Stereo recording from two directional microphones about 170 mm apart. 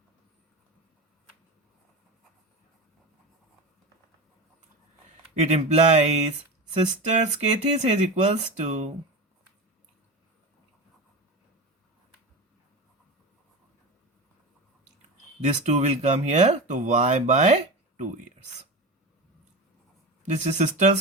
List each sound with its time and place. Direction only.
5.4 s speech: 40° right (ahead or behind)
15.4 s speech: 40° right (ahead or behind)
20.2 s speech: 45° right (ahead or behind)